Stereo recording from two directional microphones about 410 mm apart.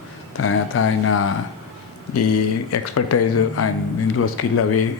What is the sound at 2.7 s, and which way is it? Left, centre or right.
Speech, left.